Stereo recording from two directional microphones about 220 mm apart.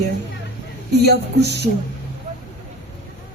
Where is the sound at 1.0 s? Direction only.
50° right (ahead or behind).